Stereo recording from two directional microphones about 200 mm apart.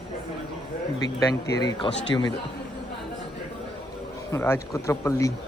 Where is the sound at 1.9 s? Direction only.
65° left (ahead or behind).